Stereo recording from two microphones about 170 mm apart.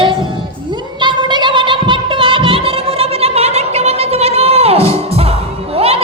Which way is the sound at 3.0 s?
35° right (ahead or behind).